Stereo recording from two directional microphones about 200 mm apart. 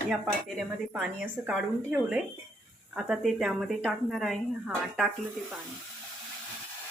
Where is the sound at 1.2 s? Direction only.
5° right (ahead or behind).